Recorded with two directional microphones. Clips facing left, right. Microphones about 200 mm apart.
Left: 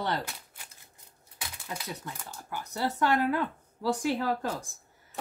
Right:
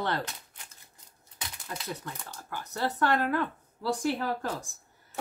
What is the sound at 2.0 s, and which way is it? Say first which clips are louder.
Speech: even; 15° left (ahead or behind).